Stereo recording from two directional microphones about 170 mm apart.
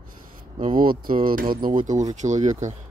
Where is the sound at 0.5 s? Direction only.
50° right (ahead or behind).